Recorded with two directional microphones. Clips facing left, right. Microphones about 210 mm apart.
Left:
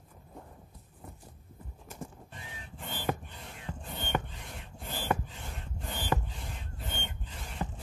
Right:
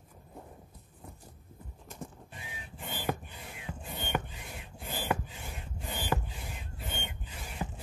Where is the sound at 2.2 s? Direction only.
10° right (ahead or behind).